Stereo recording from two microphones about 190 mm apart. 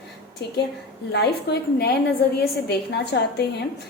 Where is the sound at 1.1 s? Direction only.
60° left (ahead or behind).